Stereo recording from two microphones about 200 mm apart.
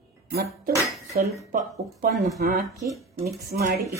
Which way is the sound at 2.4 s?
45° right (ahead or behind).